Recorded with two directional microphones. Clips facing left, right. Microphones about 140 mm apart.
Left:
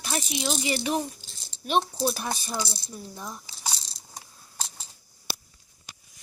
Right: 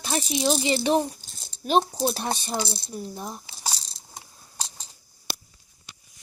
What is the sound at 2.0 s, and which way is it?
Speech, 25° right (ahead or behind).